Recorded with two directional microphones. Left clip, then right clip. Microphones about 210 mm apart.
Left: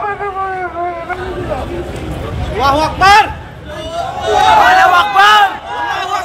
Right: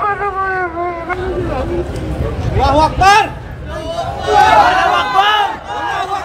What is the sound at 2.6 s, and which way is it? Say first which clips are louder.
Vehicle: even; 10° right (ahead or behind).